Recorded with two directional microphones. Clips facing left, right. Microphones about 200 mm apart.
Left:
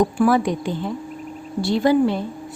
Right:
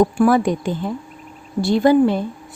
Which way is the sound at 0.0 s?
50° right (ahead or behind).